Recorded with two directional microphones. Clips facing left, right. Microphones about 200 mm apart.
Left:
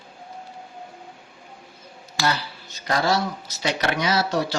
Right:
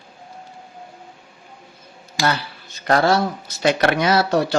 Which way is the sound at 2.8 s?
55° right (ahead or behind).